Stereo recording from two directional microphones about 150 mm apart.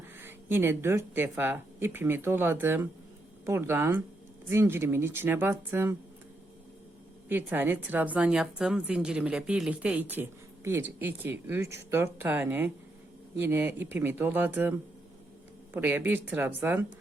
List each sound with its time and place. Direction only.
0.2 s a woman's voice: 15° right (ahead or behind)
7.3 s a woman's voice: 15° right (ahead or behind)